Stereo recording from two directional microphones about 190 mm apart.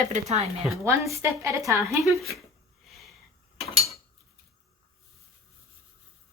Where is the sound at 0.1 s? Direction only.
35° right (ahead or behind).